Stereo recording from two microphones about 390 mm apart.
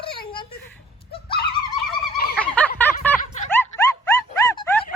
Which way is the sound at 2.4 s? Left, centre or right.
Centre.